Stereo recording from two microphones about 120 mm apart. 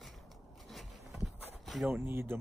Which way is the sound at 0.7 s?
Centre (ahead or behind).